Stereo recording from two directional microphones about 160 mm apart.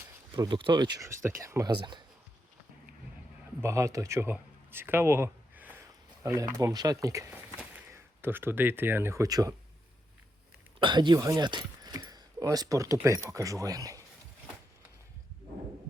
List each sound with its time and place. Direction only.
0.3 s speech: 25° right (ahead or behind)
3.6 s speech: 15° right (ahead or behind)
10.8 s speech: 30° right (ahead or behind)